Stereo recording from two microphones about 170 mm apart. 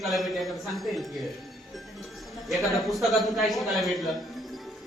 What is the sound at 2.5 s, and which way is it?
A man's voice, centre (ahead or behind).